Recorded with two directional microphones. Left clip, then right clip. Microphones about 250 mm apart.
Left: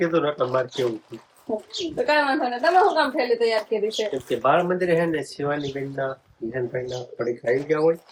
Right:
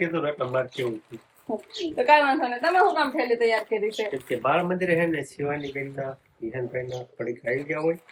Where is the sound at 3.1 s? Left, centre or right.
Centre.